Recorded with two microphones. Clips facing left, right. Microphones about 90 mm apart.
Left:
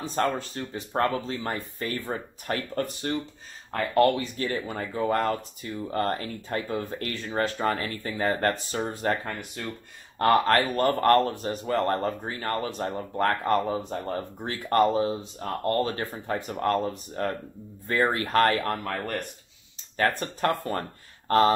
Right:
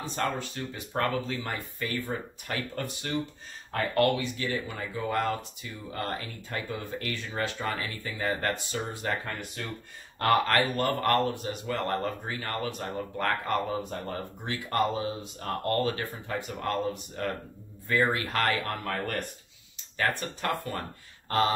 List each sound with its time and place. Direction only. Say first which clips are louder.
0.0 s speech: left 4 dB; 40° left (ahead or behind)
15.4 s speech: left 2 dB; 30° left (ahead or behind)
20.0 s speech: left 5 dB; 40° left (ahead or behind)